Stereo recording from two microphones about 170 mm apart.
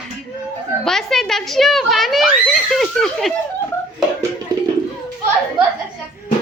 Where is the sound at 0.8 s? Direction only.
Centre (ahead or behind).